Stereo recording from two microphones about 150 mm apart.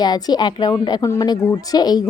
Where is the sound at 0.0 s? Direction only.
25° left (ahead or behind).